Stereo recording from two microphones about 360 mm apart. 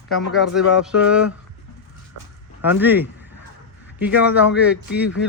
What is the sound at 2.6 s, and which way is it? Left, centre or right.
Speech, centre.